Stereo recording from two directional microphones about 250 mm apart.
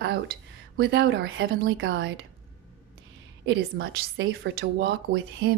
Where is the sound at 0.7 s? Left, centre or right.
Right.